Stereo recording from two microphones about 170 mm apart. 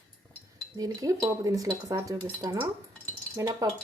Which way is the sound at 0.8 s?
20° right (ahead or behind).